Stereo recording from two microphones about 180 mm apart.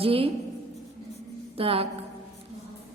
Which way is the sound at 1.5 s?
30° right (ahead or behind).